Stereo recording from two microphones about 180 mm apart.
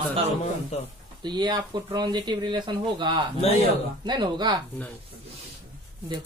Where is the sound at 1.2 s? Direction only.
25° right (ahead or behind).